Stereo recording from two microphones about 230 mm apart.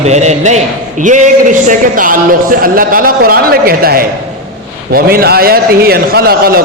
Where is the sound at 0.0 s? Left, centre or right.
Right.